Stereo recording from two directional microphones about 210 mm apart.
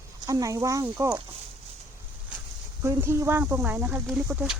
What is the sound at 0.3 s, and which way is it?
Speech, 15° right (ahead or behind).